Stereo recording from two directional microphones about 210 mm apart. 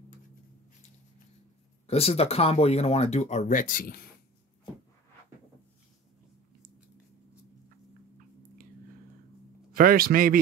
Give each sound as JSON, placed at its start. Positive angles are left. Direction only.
{"t": 1.9, "sound": "speech", "side_deg": 30}
{"t": 9.8, "sound": "speech", "side_deg": -45}